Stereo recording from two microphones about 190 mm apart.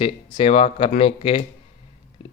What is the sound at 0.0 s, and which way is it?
Speech, 30° left (ahead or behind).